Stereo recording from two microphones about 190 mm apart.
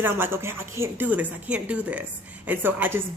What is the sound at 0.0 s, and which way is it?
A woman's voice, 10° right (ahead or behind).